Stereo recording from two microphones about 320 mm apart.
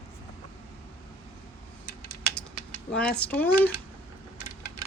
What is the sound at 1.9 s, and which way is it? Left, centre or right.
Typing, left.